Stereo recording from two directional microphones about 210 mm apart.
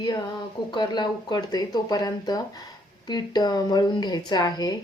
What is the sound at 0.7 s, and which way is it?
A woman's voice, 20° left (ahead or behind).